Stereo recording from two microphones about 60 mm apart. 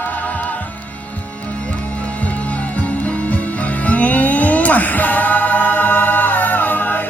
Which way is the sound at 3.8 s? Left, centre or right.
Left.